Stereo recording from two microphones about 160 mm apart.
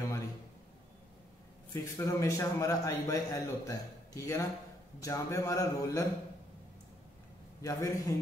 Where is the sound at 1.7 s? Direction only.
20° left (ahead or behind).